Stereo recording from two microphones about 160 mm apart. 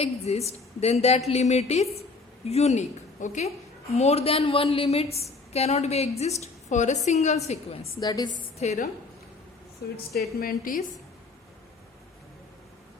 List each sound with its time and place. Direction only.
0.0 s a woman's voice: 40° left (ahead or behind)
7.9 s a woman's voice: 25° left (ahead or behind)
8.5 s a woman's voice: 45° left (ahead or behind)
10.1 s a woman's voice: 70° left (ahead or behind)